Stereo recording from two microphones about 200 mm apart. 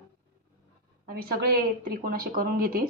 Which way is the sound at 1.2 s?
45° right (ahead or behind).